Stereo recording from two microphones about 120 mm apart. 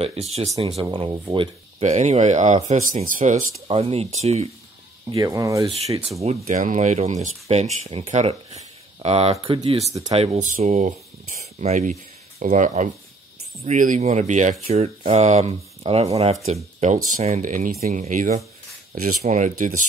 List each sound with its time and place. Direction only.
0.0 s speech: 60° right (ahead or behind)
1.2 s speech: 40° right (ahead or behind)
1.8 s speech: 70° right (ahead or behind); by 3.3 s 90° right
3.6 s speech: 55° right (ahead or behind)
5.1 s speech: 30° right (ahead or behind)
6.2 s speech: 90° right; by 9.8 s 45° right (ahead or behind)
10.1 s speech: 60° right (ahead or behind)
16.8 s speech: 80° right